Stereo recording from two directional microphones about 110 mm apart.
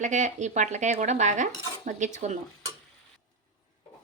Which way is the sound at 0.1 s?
90° right.